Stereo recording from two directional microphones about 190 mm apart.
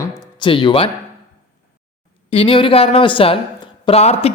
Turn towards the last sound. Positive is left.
turn(degrees=35)  # may be behind; listen again after turning